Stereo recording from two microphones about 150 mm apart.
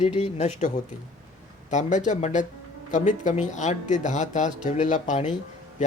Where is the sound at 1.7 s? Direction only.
55° left (ahead or behind).